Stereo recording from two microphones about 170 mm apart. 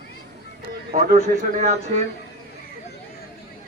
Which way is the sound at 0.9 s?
45° right (ahead or behind).